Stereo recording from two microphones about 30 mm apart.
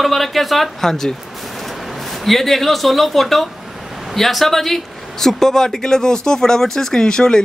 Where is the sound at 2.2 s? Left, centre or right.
Centre.